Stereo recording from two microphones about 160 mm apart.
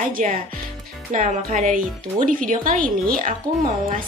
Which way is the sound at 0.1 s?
55° right (ahead or behind).